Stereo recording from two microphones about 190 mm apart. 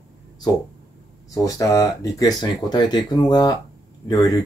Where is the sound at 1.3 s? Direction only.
20° left (ahead or behind).